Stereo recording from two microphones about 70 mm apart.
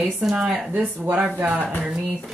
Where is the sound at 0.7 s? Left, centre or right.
Right.